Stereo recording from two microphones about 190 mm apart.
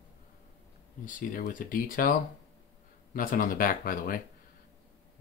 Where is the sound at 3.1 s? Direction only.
45° left (ahead or behind).